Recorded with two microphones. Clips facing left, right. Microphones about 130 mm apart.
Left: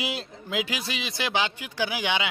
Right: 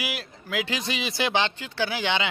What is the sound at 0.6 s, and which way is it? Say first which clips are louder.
Speech: right 2 dB; 5° left (ahead or behind).